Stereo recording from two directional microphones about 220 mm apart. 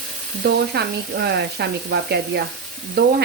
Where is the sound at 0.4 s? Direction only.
50° right (ahead or behind).